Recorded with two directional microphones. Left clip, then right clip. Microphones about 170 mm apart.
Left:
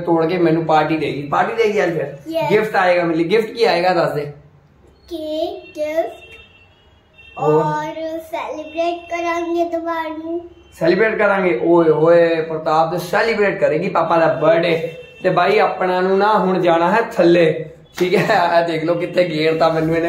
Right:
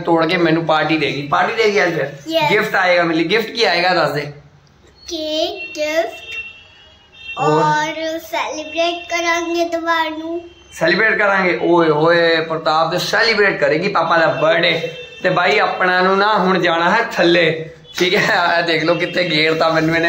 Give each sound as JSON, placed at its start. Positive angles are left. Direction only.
{"t": 0.0, "sound": "a man's voice", "side_deg": 0}
{"t": 5.1, "sound": "child singing", "side_deg": 20}
{"t": 7.6, "sound": "child singing", "side_deg": 15}
{"t": 10.8, "sound": "a man's voice", "side_deg": 5}